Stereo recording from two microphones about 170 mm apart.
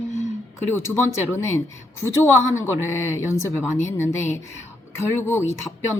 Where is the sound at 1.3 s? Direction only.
15° left (ahead or behind).